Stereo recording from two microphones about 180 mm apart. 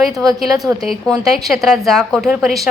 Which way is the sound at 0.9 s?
5° right (ahead or behind).